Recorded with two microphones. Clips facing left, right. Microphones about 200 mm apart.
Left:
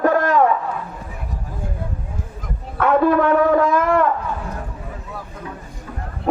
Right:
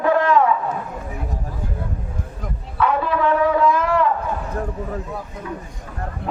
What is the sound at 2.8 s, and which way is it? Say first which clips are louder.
Shofar: left 5 dB; 50° left (ahead or behind).